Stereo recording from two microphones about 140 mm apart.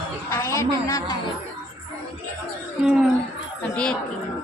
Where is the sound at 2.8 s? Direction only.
Centre (ahead or behind).